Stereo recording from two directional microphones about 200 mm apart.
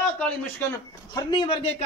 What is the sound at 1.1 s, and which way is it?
Speech, 25° left (ahead or behind).